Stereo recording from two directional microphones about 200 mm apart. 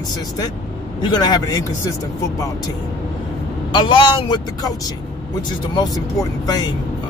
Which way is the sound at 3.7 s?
25° left (ahead or behind).